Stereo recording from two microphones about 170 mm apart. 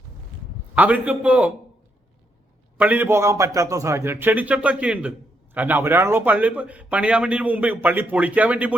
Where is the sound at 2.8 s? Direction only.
10° right (ahead or behind).